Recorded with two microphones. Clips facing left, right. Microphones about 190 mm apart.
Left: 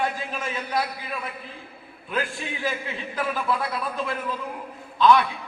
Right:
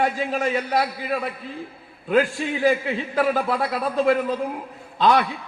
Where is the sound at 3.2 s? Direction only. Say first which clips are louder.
Right 3 dB; 45° right (ahead or behind).